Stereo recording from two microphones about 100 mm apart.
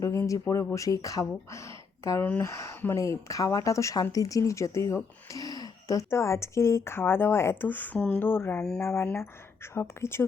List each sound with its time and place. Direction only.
0.0 s speech: 30° left (ahead or behind)
2.2 s speech: 15° left (ahead or behind)
2.5 s speech: 25° left (ahead or behind)
7.9 s speech: 10° left (ahead or behind)
8.2 s speech: 20° left (ahead or behind)